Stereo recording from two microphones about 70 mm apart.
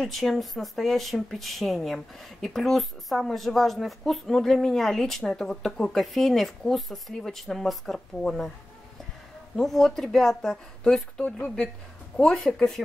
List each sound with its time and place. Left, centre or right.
0.0 s speech: centre
9.6 s speech: centre
11.2 s speech: centre
12.2 s speech: centre